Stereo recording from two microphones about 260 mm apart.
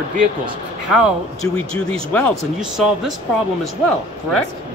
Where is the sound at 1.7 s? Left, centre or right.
Centre.